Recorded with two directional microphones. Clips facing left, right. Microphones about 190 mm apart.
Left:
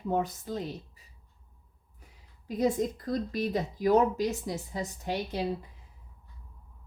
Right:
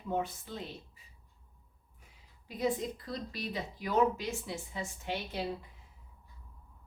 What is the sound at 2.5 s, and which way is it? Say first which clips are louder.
Speech: left 6 dB; 45° left (ahead or behind).